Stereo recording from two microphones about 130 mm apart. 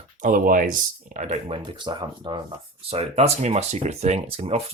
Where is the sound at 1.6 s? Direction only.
35° right (ahead or behind).